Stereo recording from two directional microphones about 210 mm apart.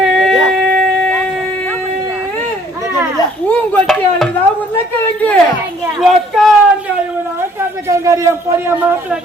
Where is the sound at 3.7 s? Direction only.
Centre (ahead or behind).